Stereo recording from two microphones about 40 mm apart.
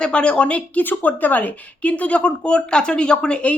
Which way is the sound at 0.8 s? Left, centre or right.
Left.